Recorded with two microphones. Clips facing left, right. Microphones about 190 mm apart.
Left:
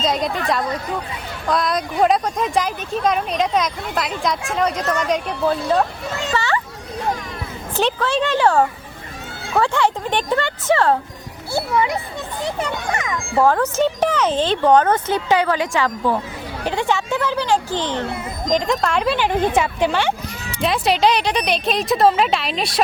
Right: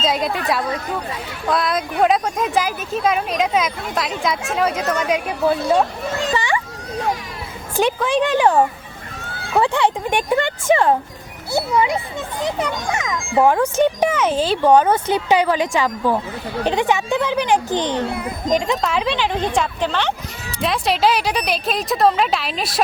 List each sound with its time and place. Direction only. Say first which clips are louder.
0.0 s speech: even; 5° right (ahead or behind)
1.5 s speech: even; 5° right (ahead or behind)
6.3 s vehicle: left 2 dB; 15° right (ahead or behind)
7.8 s speech: right 2 dB; 10° right (ahead or behind)
18.5 s speech: left 1 dB; centre (ahead or behind)
20.6 s speech: left 1 dB; centre (ahead or behind)